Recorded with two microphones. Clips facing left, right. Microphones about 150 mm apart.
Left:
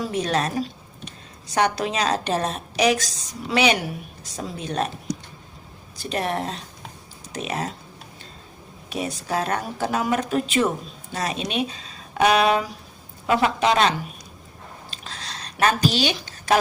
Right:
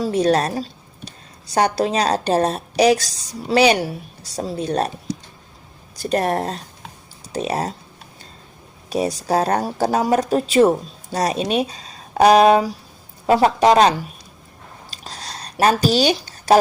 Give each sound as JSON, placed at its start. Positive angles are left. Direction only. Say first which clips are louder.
{"t": 0.0, "sound": "a woman's voice", "louder": "right 6 dB", "side_deg": -35}
{"t": 6.0, "sound": "a woman's voice", "louder": "right 6 dB", "side_deg": -40}
{"t": 8.9, "sound": "a woman's voice", "louder": "right 7 dB", "side_deg": -35}
{"t": 14.8, "sound": "a sound", "louder": "right 4 dB", "side_deg": -40}